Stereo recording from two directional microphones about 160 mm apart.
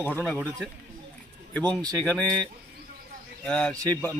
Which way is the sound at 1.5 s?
10° left (ahead or behind).